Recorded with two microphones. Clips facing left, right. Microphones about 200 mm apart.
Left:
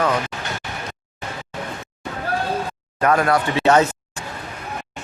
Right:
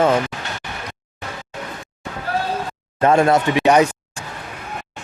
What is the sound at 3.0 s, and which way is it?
Speech, 25° right (ahead or behind).